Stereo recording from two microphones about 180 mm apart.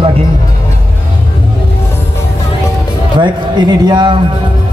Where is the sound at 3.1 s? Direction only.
25° right (ahead or behind).